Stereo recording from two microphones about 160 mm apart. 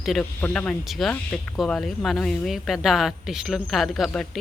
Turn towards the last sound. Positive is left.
turn(degrees=0)  # may be behind; listen again after turning